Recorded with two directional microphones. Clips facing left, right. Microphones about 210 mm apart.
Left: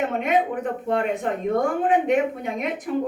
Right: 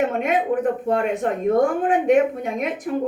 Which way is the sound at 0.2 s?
45° right (ahead or behind).